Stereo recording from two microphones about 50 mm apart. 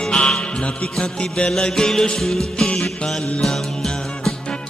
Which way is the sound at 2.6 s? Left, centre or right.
Centre.